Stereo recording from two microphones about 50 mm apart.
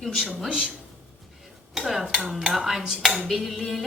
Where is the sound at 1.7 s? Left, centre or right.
Centre.